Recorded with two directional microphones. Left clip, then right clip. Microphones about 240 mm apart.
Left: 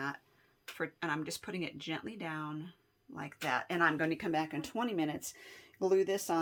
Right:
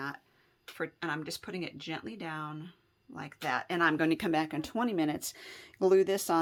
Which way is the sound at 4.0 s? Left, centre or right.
Right.